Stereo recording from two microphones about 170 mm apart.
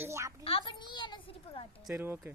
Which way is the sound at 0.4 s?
30° left (ahead or behind).